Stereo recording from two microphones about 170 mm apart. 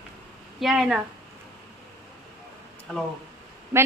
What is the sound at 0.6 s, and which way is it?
Speech, 5° right (ahead or behind).